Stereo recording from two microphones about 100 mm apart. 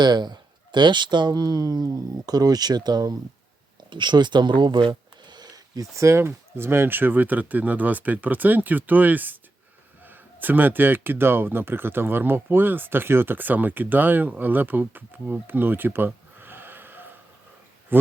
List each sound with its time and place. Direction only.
0.0 s speech: 45° right (ahead or behind); by 17.1 s 20° right (ahead or behind)